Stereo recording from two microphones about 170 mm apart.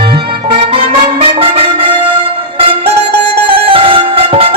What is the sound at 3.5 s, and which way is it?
Music, 30° right (ahead or behind).